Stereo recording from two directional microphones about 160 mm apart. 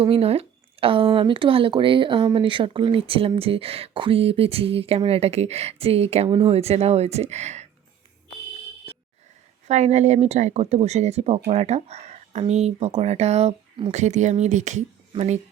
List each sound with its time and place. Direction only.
0.0 s speech: 40° right (ahead or behind)
9.6 s speech: 45° right (ahead or behind)
13.9 s speech: 45° right (ahead or behind)